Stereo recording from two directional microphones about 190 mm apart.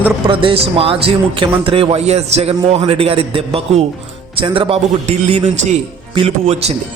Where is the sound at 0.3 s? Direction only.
30° right (ahead or behind).